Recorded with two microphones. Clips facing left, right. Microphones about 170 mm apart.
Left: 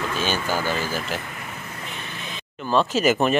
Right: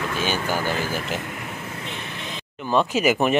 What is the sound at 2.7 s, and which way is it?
Speech, 15° right (ahead or behind).